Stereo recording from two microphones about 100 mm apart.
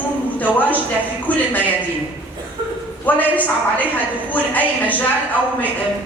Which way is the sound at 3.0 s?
15° left (ahead or behind).